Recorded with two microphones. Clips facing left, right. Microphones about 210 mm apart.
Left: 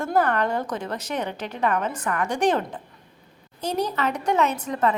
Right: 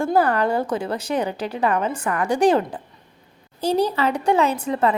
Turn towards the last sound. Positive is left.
turn(degrees=-30)  # may be behind; listen again after turning